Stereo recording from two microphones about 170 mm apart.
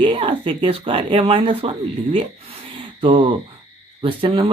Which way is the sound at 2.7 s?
30° right (ahead or behind).